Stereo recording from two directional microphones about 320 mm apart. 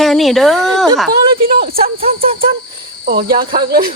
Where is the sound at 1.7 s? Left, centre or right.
Right.